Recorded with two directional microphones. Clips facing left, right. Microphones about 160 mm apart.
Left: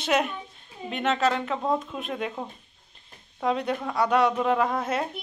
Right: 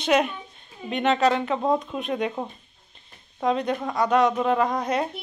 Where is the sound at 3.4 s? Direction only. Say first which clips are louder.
Right 2 dB; 10° left (ahead or behind).